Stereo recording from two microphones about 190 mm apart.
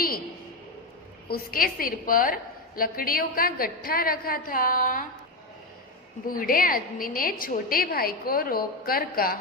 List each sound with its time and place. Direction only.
1.3 s a woman's voice: 50° left (ahead or behind)
6.2 s a woman's voice: 50° left (ahead or behind)